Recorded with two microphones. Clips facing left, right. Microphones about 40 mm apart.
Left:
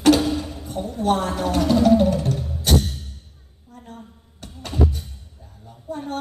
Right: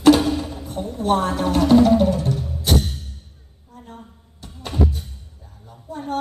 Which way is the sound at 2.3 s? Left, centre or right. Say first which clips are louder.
Right 1 dB; centre.